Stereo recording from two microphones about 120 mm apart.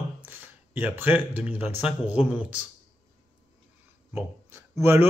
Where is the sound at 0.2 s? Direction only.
15° right (ahead or behind).